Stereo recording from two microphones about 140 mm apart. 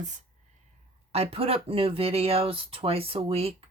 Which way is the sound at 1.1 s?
45° right (ahead or behind).